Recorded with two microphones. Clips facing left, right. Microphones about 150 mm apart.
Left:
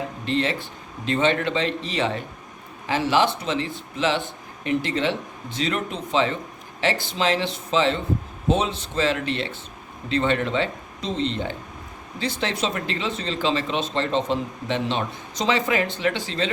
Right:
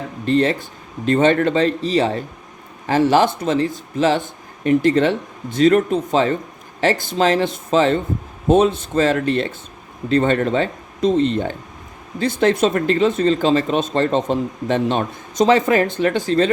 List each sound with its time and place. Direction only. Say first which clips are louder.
0.3 s speech: right 8 dB; 45° right (ahead or behind)